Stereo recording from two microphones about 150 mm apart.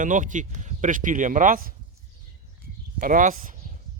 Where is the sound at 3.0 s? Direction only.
65° right (ahead or behind).